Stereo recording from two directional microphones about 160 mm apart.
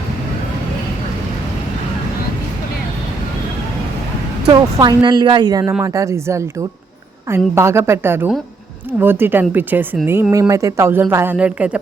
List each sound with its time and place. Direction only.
4.8 s a woman's voice: 25° right (ahead or behind); by 11.8 s 10° right (ahead or behind)